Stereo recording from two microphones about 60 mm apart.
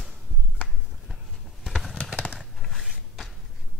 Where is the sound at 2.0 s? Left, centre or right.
Centre.